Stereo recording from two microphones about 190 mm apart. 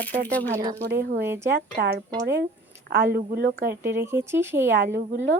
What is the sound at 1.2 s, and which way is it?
Speech, 10° right (ahead or behind).